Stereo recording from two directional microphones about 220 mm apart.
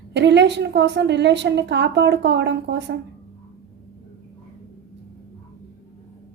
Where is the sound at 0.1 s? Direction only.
50° right (ahead or behind).